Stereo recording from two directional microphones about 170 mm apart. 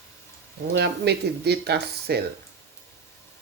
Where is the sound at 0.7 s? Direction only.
80° right.